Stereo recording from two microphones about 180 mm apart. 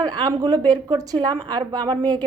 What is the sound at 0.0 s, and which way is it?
A woman's voice, 25° right (ahead or behind).